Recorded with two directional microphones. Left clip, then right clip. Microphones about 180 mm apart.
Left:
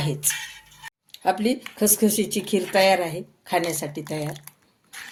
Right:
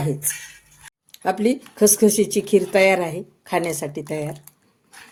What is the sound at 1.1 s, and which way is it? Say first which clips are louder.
Speech: right 2 dB; 50° right (ahead or behind).